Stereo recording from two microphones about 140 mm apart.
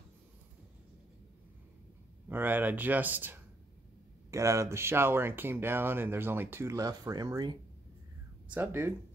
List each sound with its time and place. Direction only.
2.2 s speech: 15° right (ahead or behind); by 7.5 s 30° right (ahead or behind)
8.5 s speech: 15° right (ahead or behind)